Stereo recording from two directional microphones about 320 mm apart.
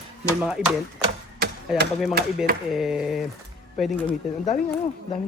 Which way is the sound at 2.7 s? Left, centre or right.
Centre.